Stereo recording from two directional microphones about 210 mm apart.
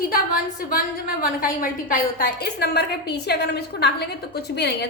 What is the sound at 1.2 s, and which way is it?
A woman's voice, 40° left (ahead or behind).